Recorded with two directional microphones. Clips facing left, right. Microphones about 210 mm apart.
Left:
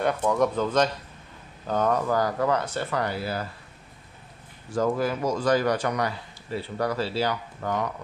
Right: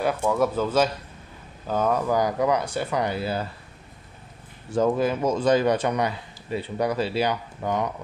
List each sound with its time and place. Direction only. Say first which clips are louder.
0.0 s speech: even; 5° right (ahead or behind); by 3.4 s 25° right (ahead or behind)
4.7 s speech: right 3 dB; 20° right (ahead or behind)